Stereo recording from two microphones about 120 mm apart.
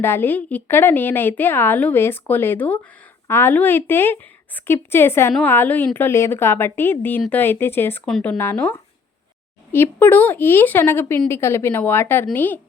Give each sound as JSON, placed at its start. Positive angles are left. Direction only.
{"t": 0.0, "sound": "a woman's voice", "side_deg": 20}